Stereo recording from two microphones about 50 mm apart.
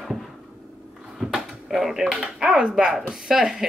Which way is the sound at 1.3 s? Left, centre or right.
Centre.